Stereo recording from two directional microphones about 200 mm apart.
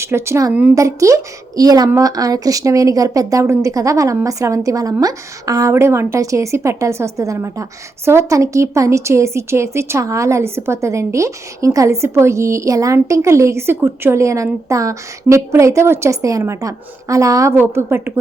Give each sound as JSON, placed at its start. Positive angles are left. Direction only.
{"t": 0.0, "sound": "a woman's voice", "side_deg": -15}